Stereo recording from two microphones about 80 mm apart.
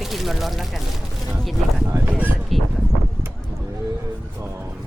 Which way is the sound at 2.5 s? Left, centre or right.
Centre.